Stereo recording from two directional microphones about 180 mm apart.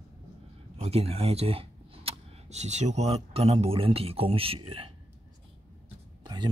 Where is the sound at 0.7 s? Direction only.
35° right (ahead or behind).